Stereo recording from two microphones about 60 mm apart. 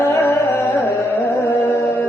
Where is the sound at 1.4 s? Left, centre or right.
Left.